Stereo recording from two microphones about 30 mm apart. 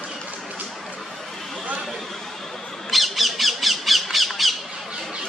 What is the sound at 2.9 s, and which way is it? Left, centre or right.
Squawk, centre.